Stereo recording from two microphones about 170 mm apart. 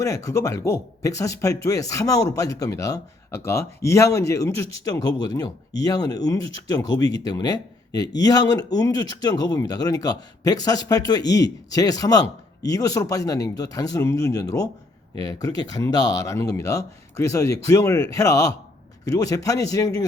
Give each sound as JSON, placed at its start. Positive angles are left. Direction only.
{"t": 0.0, "sound": "a man's voice", "side_deg": 20}